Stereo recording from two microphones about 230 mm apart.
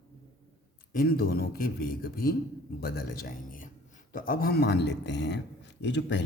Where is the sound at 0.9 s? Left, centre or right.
Left.